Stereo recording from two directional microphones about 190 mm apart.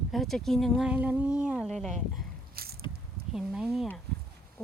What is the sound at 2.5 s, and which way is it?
Squish, 55° right (ahead or behind).